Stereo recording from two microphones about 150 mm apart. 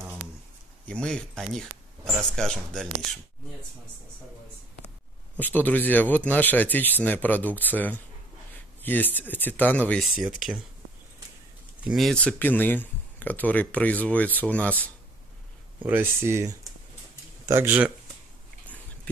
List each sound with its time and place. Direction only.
0.8 s speech: 5° left (ahead or behind)
5.4 s speech: 10° left (ahead or behind)
10.1 s speech: 5° right (ahead or behind)
11.9 s speech: 5° left (ahead or behind)
15.8 s speech: 15° right (ahead or behind)